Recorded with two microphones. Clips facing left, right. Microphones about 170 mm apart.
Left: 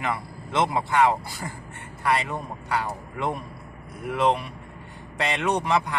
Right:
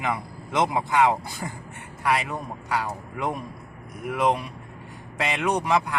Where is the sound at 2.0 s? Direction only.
5° right (ahead or behind).